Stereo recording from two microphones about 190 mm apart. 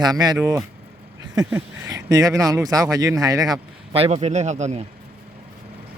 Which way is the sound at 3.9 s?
30° right (ahead or behind).